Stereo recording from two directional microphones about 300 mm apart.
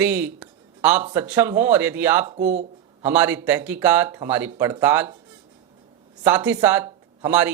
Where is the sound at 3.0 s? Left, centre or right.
Centre.